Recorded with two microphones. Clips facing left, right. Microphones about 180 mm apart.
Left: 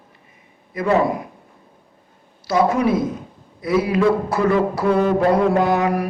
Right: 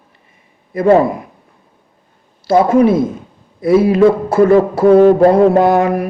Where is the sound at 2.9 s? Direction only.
25° right (ahead or behind).